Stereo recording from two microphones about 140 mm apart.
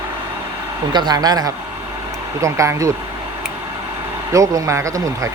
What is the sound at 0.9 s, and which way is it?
Speech, 30° right (ahead or behind).